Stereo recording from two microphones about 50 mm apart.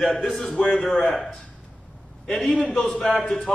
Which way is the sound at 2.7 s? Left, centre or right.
Left.